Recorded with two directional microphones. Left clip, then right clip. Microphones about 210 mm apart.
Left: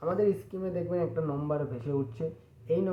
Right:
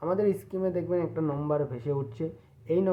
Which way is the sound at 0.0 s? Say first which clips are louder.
Right 1 dB; 45° right (ahead or behind).